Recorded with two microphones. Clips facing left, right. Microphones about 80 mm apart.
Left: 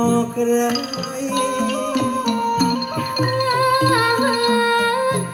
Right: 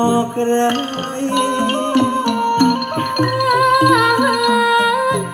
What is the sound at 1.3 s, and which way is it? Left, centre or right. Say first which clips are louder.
Music: right 3 dB; right.